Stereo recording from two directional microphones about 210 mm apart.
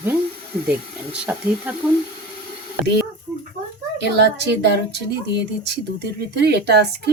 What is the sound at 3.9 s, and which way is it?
Speech, 55° right (ahead or behind).